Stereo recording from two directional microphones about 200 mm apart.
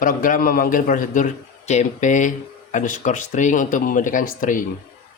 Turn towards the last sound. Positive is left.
turn(degrees=45)  # may be behind; listen again after turning